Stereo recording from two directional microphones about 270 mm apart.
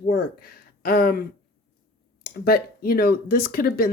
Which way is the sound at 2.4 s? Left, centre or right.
Left.